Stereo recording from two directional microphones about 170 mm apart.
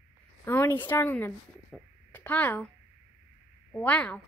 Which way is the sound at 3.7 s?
10° left (ahead or behind).